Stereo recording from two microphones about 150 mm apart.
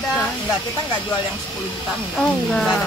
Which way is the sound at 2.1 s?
5° left (ahead or behind).